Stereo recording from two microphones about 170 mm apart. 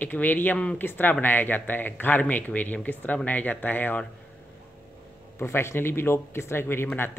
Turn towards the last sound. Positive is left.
turn(degrees=10)  # may be behind; listen again after turning